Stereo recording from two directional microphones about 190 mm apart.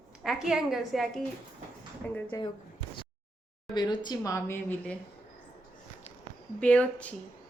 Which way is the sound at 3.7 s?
25° left (ahead or behind).